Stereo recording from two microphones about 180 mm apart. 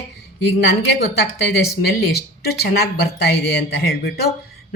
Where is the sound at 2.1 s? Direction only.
60° left (ahead or behind).